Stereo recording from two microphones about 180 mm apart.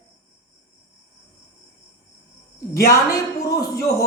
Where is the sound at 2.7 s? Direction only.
15° left (ahead or behind).